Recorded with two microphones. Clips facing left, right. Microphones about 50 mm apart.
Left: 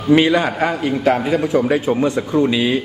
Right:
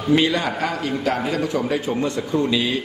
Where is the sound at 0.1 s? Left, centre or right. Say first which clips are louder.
Left 5 dB; left.